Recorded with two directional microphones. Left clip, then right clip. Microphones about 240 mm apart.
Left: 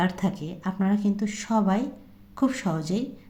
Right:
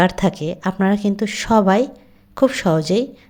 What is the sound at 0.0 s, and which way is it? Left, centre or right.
A woman's voice, right.